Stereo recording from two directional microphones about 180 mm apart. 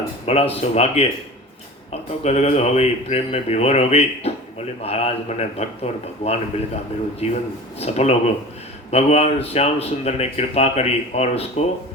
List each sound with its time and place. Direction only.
0.3 s speech: 35° left (ahead or behind)